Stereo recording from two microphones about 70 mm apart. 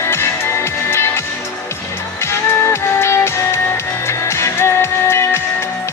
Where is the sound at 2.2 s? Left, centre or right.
Left.